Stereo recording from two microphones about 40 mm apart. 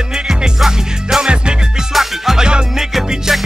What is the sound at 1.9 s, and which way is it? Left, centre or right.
Music, centre.